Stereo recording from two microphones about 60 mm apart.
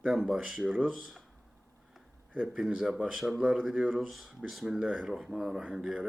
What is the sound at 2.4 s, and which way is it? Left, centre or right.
Speech, centre.